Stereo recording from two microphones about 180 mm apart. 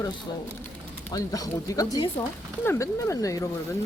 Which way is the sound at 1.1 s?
20° left (ahead or behind).